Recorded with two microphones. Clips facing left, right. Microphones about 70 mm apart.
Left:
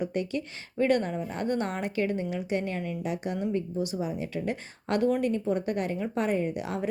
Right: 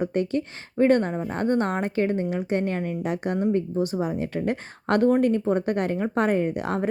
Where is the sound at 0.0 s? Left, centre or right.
Right.